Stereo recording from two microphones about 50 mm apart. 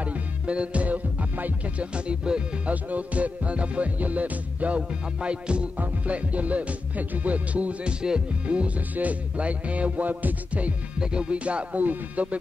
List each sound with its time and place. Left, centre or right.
0.0 s music: right
2.0 s music: centre
2.7 s music: right
11.0 s music: centre